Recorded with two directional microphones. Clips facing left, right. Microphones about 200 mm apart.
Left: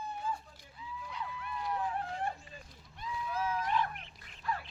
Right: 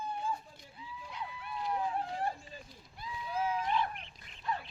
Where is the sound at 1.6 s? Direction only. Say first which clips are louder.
Right 2 dB; 30° right (ahead or behind).